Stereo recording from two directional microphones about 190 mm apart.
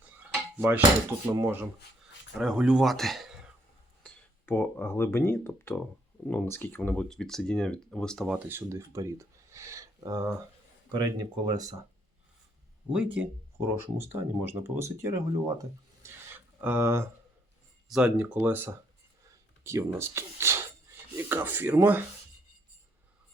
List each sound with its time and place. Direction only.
0.5 s dishes: 10° right (ahead or behind)
1.3 s speech: 15° right (ahead or behind)
2.4 s speech: 5° right (ahead or behind)
4.0 s speech: 10° left (ahead or behind)
8.4 s speech: 15° right (ahead or behind)
12.9 s speech: 5° right (ahead or behind)
16.0 s a sound: 10° right (ahead or behind)
17.8 s speech: 5° right (ahead or behind)